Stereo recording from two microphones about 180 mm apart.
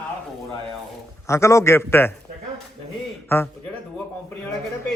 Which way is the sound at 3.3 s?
15° left (ahead or behind).